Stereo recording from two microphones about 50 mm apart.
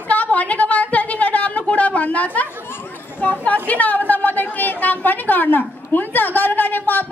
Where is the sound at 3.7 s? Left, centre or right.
Left.